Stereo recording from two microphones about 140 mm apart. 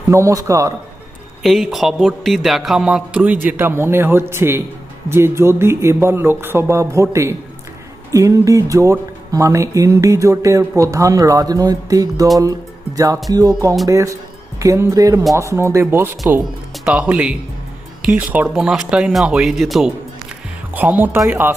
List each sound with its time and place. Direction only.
0.1 s speech: 20° right (ahead or behind)
1.4 s a man's voice: centre (ahead or behind); by 12.3 s 25° right (ahead or behind)
13.3 s a man's voice: 25° right (ahead or behind); by 19.9 s centre (ahead or behind)
20.7 s speech: 10° right (ahead or behind)